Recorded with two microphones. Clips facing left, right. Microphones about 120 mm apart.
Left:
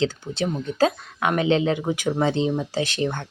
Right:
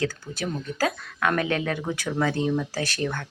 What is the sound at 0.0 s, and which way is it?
Speech, 20° left (ahead or behind).